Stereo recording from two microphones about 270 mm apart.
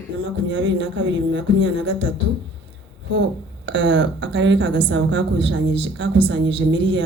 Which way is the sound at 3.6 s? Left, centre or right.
Right.